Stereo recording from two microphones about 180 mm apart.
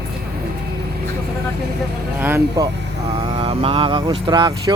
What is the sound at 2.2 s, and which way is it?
Speech, 10° right (ahead or behind).